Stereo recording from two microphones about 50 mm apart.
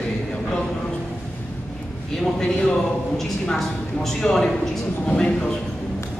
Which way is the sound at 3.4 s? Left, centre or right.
Centre.